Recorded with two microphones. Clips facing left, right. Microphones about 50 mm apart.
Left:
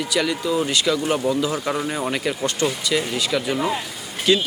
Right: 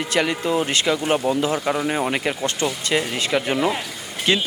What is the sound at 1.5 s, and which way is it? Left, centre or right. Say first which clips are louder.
Speech: right 2 dB; centre.